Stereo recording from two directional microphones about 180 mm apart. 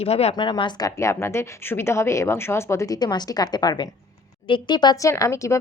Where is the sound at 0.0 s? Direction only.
35° left (ahead or behind).